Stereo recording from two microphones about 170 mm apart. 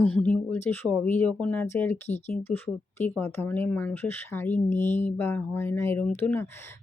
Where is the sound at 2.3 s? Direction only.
10° left (ahead or behind).